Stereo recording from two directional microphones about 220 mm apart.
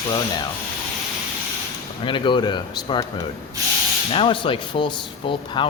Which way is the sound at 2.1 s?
20° left (ahead or behind).